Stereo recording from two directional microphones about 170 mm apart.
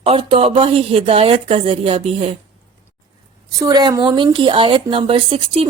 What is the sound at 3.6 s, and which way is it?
Speech, 25° right (ahead or behind).